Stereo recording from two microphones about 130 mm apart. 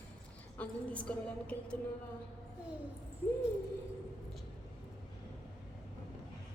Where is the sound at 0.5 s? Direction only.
10° left (ahead or behind).